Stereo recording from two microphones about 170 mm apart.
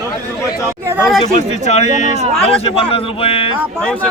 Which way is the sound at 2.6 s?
35° left (ahead or behind).